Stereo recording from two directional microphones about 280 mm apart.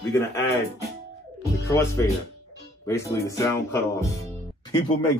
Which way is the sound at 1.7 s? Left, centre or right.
Centre.